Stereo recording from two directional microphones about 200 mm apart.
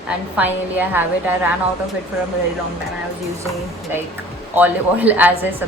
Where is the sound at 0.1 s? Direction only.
10° right (ahead or behind).